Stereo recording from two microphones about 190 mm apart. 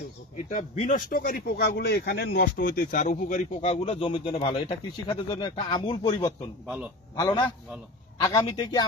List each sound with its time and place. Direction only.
0.5 s speech: 45° left (ahead or behind)
3.7 s speech: 30° left (ahead or behind)